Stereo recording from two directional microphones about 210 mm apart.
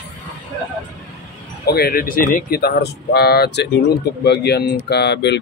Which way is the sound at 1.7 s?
50° left (ahead or behind).